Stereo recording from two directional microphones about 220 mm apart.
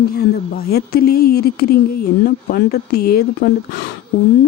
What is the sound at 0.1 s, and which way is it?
A woman's voice, 45° left (ahead or behind).